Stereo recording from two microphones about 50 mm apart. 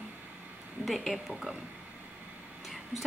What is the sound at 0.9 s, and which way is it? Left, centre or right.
Speech, centre.